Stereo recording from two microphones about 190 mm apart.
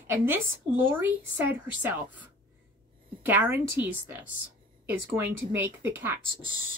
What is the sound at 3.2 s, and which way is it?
A woman's voice, 10° right (ahead or behind).